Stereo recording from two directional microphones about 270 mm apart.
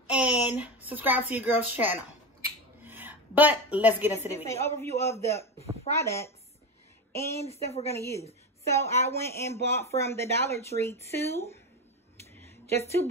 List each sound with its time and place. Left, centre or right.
0.1 s a sound: centre
0.8 s a woman's voice: centre
4.5 s speech: centre
7.3 s a woman's voice: left
8.6 s speech: centre
12.4 s a sound: centre